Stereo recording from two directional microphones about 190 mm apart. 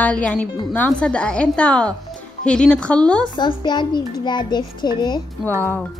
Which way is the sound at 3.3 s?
25° left (ahead or behind).